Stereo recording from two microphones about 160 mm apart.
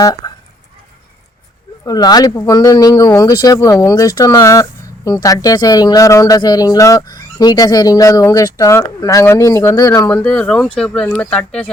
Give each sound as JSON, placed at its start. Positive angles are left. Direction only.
{"t": 1.8, "sound": "speech", "side_deg": 25}